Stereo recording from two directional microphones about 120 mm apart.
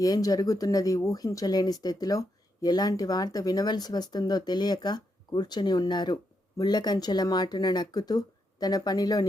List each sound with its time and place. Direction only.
0.0 s speech: 30° left (ahead or behind)